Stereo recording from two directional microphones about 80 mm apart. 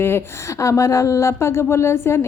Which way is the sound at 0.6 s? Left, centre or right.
Left.